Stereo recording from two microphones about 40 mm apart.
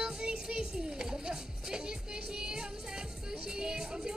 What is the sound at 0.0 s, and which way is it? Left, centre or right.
Music, centre.